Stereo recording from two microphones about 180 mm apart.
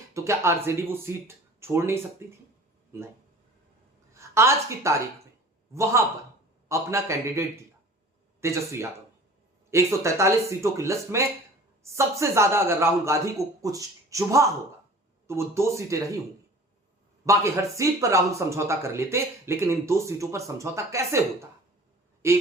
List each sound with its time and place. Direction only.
0.1 s speech: 15° right (ahead or behind)
4.1 s a woman's voice: 15° right (ahead or behind)
6.7 s speech: 15° right (ahead or behind)
17.2 s speech: 15° right (ahead or behind)